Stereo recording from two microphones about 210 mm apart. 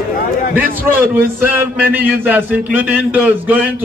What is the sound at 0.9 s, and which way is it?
A man's voice, 10° right (ahead or behind).